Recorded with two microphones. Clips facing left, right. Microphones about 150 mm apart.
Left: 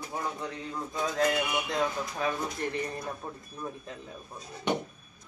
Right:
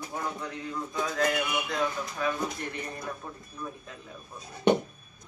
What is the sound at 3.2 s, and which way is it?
Speech, 30° left (ahead or behind).